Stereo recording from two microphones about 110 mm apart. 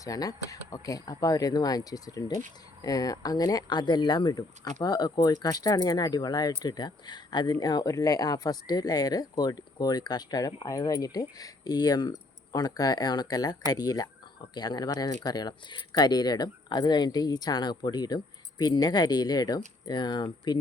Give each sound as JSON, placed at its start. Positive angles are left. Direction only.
{"t": 0.0, "sound": "speech", "side_deg": 35}